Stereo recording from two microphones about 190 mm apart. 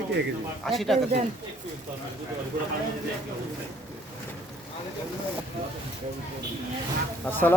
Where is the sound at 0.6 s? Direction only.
Centre (ahead or behind).